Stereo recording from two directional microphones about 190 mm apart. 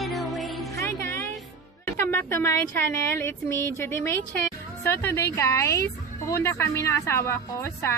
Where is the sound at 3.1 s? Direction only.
10° left (ahead or behind).